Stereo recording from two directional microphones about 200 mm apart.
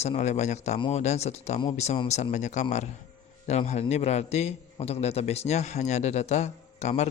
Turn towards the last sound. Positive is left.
turn(degrees=35)  # may be behind; listen again after turning